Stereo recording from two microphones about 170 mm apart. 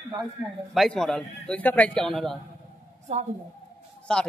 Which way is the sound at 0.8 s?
5° left (ahead or behind).